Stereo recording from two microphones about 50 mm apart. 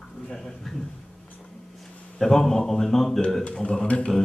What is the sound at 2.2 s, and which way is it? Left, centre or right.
Speech, centre.